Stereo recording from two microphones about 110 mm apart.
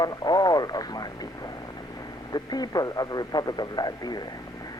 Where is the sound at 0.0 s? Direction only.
35° left (ahead or behind).